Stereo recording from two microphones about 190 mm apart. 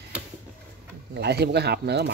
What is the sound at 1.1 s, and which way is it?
A woman's voice, 60° right (ahead or behind).